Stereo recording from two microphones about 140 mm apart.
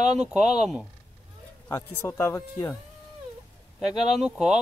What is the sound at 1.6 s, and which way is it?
Speech, 20° left (ahead or behind).